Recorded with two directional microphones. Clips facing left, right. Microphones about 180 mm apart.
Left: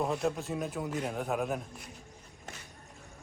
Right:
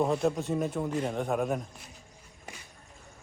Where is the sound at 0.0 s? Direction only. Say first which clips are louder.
Right 4 dB; centre (ahead or behind).